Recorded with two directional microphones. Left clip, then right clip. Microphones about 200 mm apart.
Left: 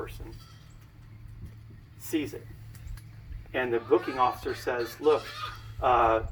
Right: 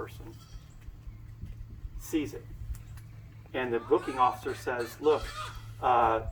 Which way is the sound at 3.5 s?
25° left (ahead or behind).